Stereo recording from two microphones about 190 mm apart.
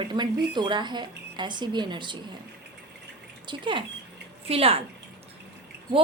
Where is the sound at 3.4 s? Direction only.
25° right (ahead or behind).